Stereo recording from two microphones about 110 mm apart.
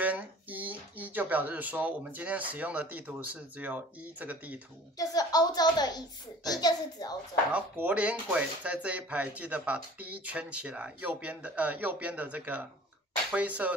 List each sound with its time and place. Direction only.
0.0 s speech: 15° right (ahead or behind)
4.9 s speech: 35° left (ahead or behind)
7.5 s speech: 15° right (ahead or behind)